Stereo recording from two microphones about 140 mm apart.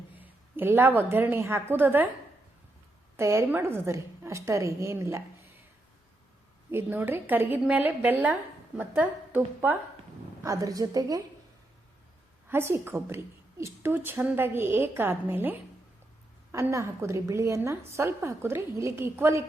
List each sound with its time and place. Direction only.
0.2 s a woman's voice: 15° right (ahead or behind)
3.2 s a woman's voice: 20° right (ahead or behind)
6.7 s a woman's voice: 15° right (ahead or behind)
10.4 s a woman's voice: 25° right (ahead or behind)
12.5 s a woman's voice: 15° right (ahead or behind)